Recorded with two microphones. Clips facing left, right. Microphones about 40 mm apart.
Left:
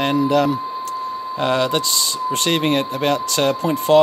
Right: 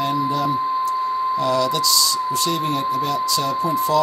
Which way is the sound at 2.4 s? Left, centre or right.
Left.